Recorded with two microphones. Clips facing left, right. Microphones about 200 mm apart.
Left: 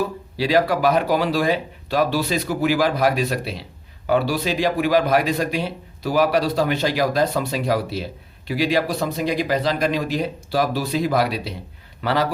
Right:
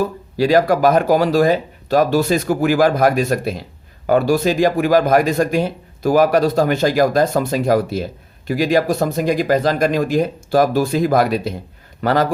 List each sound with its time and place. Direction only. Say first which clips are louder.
0.0 s speech: right 5 dB; 45° right (ahead or behind)